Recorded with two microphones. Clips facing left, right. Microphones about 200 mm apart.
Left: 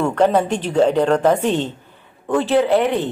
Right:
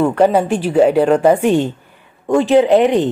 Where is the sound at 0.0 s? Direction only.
10° right (ahead or behind).